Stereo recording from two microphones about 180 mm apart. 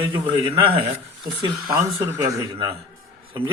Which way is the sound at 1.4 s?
15° right (ahead or behind).